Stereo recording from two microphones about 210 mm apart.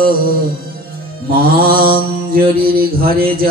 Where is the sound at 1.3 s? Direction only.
45° right (ahead or behind).